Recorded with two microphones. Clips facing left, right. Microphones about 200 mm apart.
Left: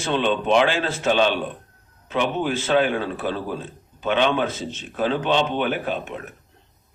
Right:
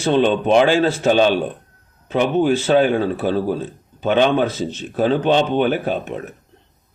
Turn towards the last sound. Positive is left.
turn(degrees=-40)  # may be behind; listen again after turning